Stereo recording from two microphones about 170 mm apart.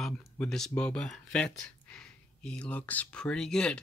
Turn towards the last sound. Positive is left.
turn(degrees=5)  # may be behind; listen again after turning